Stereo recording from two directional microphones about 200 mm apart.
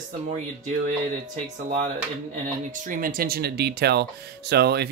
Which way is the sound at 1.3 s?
35° right (ahead or behind).